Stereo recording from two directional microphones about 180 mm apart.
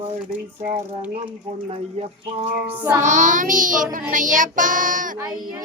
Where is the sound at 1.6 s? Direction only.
35° right (ahead or behind).